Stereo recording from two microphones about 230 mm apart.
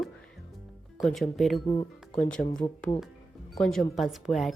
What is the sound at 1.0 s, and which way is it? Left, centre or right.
Speech, centre.